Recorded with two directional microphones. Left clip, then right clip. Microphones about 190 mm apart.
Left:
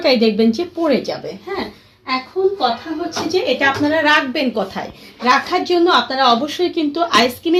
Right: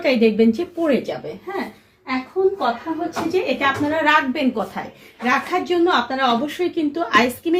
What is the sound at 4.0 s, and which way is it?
Speech, 40° left (ahead or behind).